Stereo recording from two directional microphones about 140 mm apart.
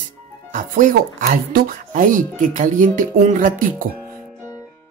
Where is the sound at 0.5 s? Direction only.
65° right (ahead or behind).